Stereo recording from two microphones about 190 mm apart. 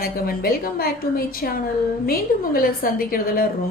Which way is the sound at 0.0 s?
50° left (ahead or behind).